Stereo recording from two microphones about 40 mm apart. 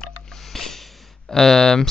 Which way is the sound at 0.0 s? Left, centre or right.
Centre.